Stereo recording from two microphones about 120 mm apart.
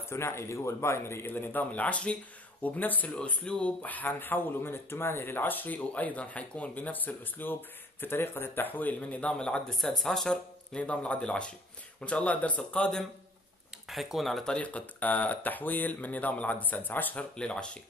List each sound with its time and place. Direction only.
0.1 s a man's voice: 20° left (ahead or behind)
13.8 s speech: centre (ahead or behind)